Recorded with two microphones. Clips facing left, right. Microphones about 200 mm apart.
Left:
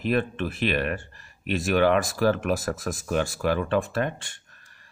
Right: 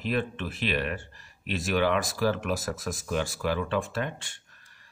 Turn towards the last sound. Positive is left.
turn(degrees=50)  # may be behind; listen again after turning